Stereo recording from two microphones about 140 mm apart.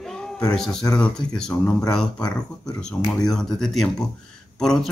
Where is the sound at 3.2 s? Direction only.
5° left (ahead or behind).